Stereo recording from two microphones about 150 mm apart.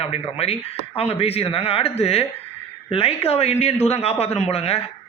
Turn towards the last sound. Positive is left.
turn(degrees=40)  # may be behind; listen again after turning